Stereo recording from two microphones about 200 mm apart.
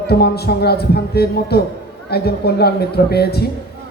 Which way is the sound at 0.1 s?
55° left (ahead or behind).